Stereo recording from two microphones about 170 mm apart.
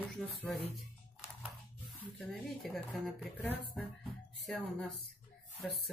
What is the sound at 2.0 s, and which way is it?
Speech, 5° left (ahead or behind).